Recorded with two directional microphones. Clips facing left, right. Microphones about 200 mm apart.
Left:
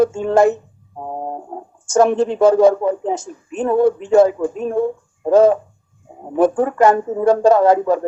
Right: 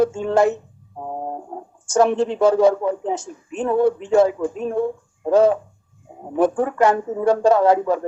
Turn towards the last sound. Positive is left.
turn(degrees=45)  # may be behind; listen again after turning